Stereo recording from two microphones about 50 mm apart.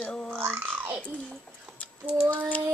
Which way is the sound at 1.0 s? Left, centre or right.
Left.